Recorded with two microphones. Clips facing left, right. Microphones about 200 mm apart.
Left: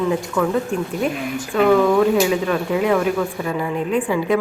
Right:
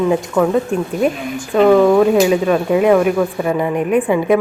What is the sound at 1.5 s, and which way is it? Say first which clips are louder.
Speech: right 5 dB; 35° right (ahead or behind).